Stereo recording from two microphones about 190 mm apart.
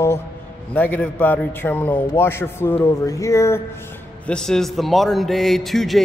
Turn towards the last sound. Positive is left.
turn(degrees=0)  # may be behind; listen again after turning